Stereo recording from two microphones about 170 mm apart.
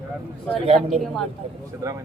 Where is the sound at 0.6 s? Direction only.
35° right (ahead or behind).